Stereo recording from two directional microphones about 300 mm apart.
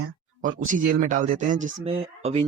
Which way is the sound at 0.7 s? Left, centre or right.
Right.